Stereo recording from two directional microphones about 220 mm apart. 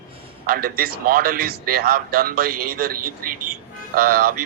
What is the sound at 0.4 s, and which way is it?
Speech, 40° right (ahead or behind).